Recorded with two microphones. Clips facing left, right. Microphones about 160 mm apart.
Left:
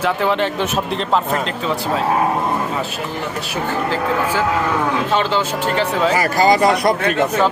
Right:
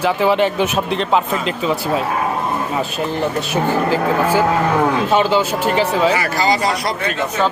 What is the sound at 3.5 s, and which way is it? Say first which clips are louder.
Speech: right 3 dB; 15° right (ahead or behind).